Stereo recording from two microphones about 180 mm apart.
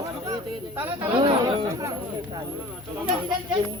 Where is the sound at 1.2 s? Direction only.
25° right (ahead or behind).